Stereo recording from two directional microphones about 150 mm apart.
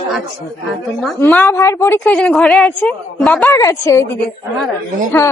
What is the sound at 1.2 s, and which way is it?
Speech, 15° left (ahead or behind).